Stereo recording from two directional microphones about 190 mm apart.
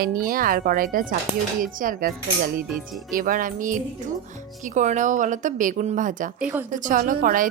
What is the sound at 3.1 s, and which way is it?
A woman's voice, 45° right (ahead or behind).